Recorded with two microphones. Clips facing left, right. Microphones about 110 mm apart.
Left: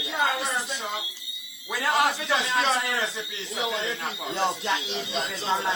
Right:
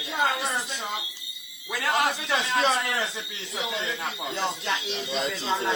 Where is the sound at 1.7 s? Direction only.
10° left (ahead or behind).